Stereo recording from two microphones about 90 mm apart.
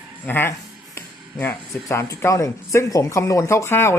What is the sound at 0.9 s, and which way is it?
Music, 20° left (ahead or behind).